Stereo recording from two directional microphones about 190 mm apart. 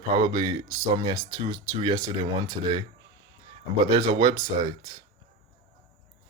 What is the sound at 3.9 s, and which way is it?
Speech, 20° right (ahead or behind).